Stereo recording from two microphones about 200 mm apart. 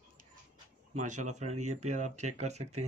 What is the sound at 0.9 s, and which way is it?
Speech, 35° right (ahead or behind).